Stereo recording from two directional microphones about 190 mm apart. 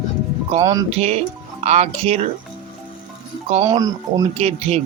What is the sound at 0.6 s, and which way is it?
Speech, 20° right (ahead or behind).